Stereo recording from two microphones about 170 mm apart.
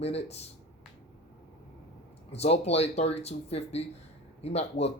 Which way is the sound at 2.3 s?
35° left (ahead or behind).